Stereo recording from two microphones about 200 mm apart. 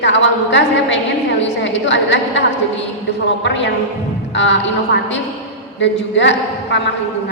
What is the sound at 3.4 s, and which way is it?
Speech, 65° left (ahead or behind).